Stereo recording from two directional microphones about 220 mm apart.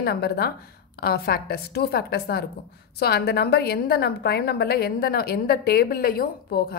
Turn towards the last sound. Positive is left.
turn(degrees=45)  # may be behind; listen again after turning